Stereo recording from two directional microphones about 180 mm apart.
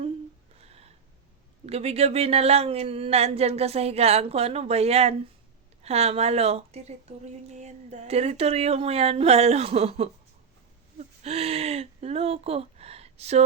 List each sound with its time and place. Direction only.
0.6 s gasp: 35° right (ahead or behind)
1.6 s speech: 35° right (ahead or behind)
11.2 s speech: 35° right (ahead or behind)